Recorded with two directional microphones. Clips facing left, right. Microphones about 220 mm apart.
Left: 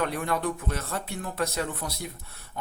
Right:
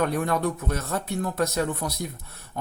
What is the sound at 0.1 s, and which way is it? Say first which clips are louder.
Speech: right 4 dB; 45° right (ahead or behind).